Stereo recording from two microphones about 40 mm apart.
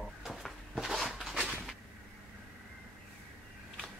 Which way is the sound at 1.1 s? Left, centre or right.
Centre.